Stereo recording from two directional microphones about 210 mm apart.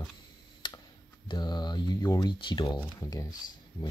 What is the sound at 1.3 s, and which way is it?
Speech, 20° left (ahead or behind).